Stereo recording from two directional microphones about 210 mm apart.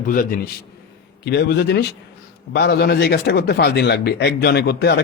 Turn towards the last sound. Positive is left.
turn(degrees=50)  # may be behind; listen again after turning